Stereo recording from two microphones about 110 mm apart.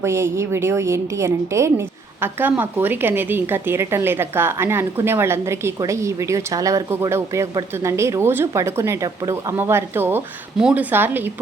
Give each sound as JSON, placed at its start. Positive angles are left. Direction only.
{"t": 0.0, "sound": "a woman's voice", "side_deg": -25}
{"t": 10.6, "sound": "a woman's voice", "side_deg": -10}
{"t": 10.9, "sound": "a woman's voice", "side_deg": -20}